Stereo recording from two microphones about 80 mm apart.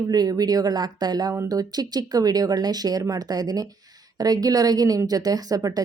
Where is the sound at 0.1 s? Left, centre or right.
Right.